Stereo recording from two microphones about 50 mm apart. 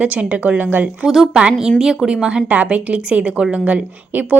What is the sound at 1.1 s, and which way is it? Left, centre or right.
Speech, centre.